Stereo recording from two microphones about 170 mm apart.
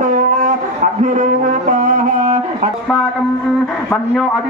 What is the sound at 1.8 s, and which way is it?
Music, 50° right (ahead or behind).